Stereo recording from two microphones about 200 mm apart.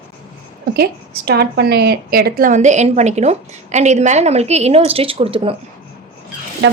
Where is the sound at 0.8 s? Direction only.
50° right (ahead or behind); by 5.5 s 30° right (ahead or behind).